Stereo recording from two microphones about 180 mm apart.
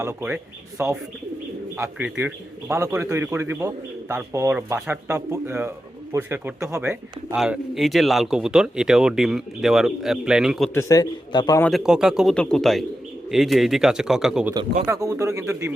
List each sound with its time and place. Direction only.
0.0 s speech: 15° right (ahead or behind)
7.3 s speech: centre (ahead or behind)
10.8 s a man's voice: 20° left (ahead or behind)
11.6 s speech: centre (ahead or behind)
14.8 s speech: 15° right (ahead or behind)